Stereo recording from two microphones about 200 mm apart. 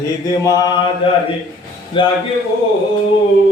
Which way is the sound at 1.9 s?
25° left (ahead or behind).